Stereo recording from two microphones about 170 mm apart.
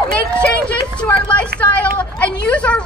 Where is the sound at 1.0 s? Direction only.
5° left (ahead or behind).